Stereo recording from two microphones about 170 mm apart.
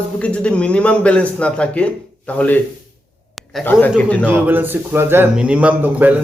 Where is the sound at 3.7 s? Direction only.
10° left (ahead or behind).